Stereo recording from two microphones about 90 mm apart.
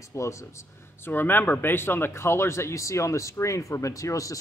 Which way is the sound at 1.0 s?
25° left (ahead or behind).